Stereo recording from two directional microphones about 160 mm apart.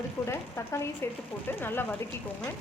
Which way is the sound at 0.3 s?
15° left (ahead or behind).